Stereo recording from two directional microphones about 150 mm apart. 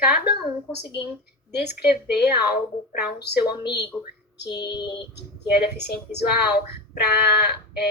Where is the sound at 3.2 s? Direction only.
90° left.